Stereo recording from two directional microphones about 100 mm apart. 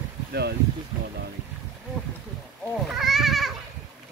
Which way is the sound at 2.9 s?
5° right (ahead or behind).